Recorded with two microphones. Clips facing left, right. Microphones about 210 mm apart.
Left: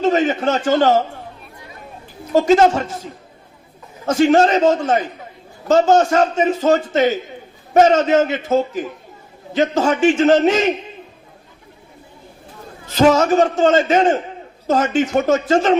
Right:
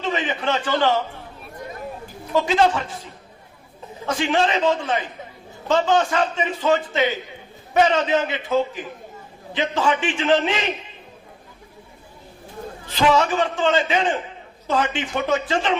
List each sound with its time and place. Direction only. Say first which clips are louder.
0.0 s a man's voice: left 8 dB; 45° left (ahead or behind)
2.2 s a man's voice: left 6 dB; 45° left (ahead or behind)
12.8 s a man's voice: left 5 dB; 45° left (ahead or behind)